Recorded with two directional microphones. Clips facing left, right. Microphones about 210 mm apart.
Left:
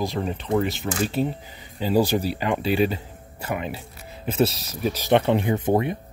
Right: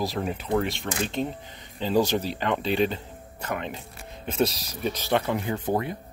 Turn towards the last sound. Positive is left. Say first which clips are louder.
# left 5 dB
turn(degrees=20)  # may be behind; listen again after turning